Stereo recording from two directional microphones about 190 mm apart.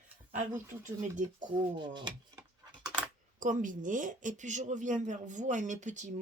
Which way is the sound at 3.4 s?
45° right (ahead or behind).